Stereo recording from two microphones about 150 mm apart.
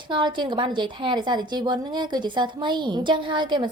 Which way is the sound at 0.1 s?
30° right (ahead or behind).